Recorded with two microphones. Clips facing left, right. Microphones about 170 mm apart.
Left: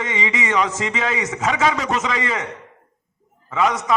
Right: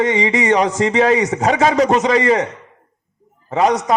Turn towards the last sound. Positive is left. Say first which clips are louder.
# right 4 dB
turn(degrees=-35)  # may be behind; listen again after turning